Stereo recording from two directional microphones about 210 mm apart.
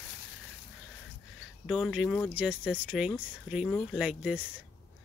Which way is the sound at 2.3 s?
5° right (ahead or behind).